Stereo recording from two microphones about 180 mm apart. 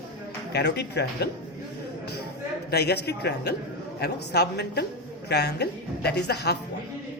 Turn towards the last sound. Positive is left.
turn(degrees=65)  # may be behind; listen again after turning